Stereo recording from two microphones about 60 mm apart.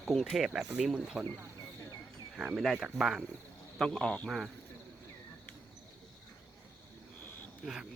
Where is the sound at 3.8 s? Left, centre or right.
Centre.